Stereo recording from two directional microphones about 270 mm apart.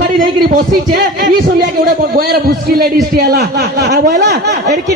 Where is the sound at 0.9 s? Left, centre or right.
Right.